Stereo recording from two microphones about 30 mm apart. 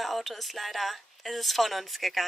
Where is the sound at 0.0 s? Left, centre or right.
Centre.